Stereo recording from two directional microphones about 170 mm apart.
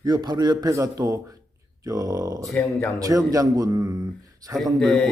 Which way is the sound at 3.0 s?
20° right (ahead or behind).